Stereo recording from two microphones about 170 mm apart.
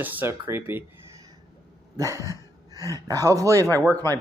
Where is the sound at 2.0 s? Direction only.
20° right (ahead or behind).